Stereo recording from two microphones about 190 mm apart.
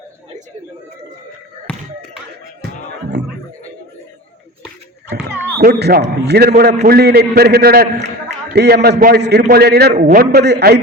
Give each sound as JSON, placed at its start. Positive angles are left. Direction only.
{"t": 1.7, "sound": "a sound", "side_deg": 5}
{"t": 3.2, "sound": "a man's voice", "side_deg": -60}
{"t": 5.5, "sound": "a man's voice", "side_deg": -55}